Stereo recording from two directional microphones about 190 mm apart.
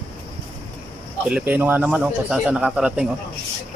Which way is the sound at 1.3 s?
5° right (ahead or behind).